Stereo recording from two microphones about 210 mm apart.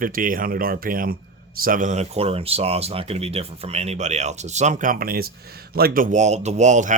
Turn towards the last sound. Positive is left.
turn(degrees=-35)  # may be behind; listen again after turning